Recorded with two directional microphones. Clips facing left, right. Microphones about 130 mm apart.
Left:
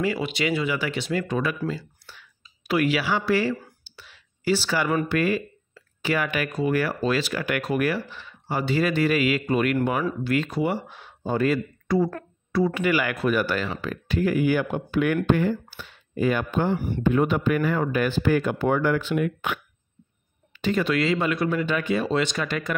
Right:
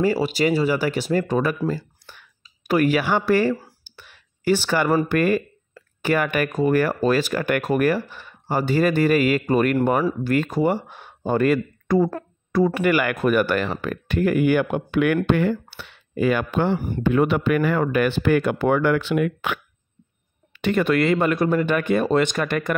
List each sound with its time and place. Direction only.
0.0 s speech: 40° right (ahead or behind)
1.7 s whispering: 50° right (ahead or behind)
5.0 s speech: 50° right (ahead or behind); by 19.6 s 90° right
20.5 s speech: 60° right (ahead or behind)